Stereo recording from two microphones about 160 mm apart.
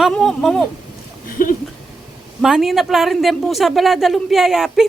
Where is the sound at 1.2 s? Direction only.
60° left (ahead or behind).